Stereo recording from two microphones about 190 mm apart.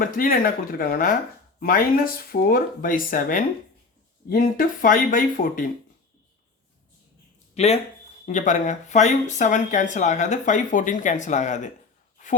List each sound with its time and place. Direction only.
0.0 s speech: 50° left (ahead or behind)
7.5 s speech: 35° left (ahead or behind)